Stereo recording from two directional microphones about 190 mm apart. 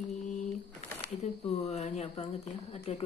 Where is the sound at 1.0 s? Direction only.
35° left (ahead or behind).